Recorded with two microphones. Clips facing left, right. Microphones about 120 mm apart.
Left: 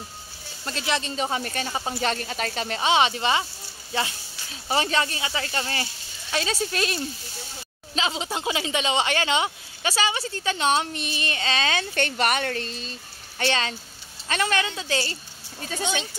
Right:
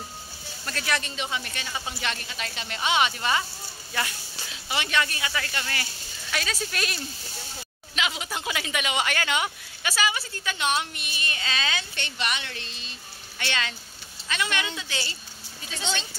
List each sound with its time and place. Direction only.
0.7 s speech: 25° left (ahead or behind)
1.1 s speech: 40° left (ahead or behind); by 4.1 s 25° left (ahead or behind)
4.5 s speech: 35° left (ahead or behind)